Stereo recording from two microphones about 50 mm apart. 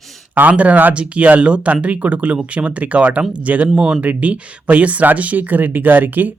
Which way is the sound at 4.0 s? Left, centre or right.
Right.